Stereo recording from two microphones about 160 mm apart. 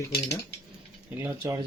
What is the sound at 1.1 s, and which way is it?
Speech, 15° right (ahead or behind).